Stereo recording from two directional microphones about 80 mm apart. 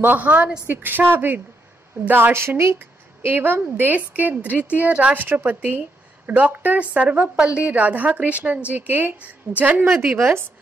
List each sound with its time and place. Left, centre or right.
0.0 s a woman's voice: right
10.1 s speech: right